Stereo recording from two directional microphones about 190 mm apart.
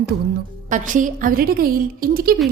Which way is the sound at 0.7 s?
40° right (ahead or behind).